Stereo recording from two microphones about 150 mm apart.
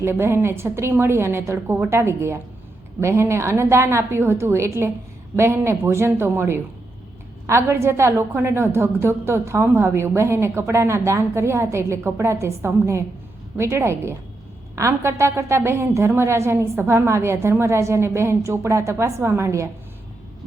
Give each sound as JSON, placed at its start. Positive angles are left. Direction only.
{"t": 0.0, "sound": "a woman's voice", "side_deg": -15}